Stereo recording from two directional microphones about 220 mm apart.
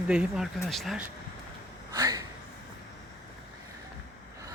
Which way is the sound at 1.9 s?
15° right (ahead or behind).